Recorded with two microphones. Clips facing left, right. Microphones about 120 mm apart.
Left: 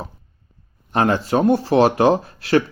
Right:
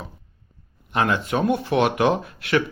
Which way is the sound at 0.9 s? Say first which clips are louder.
Left 4 dB; 35° left (ahead or behind).